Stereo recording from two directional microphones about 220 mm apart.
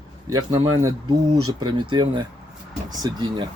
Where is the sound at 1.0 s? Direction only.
90° right.